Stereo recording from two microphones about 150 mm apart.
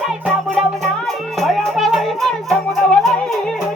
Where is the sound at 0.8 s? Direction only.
Centre (ahead or behind).